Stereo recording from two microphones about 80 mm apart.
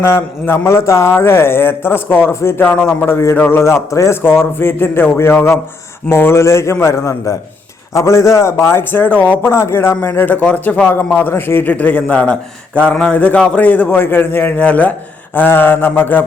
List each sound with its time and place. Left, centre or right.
0.0 s a man's voice: left
4.4 s a man's voice: left